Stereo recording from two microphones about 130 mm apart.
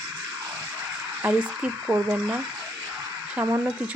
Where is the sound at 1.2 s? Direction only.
10° right (ahead or behind).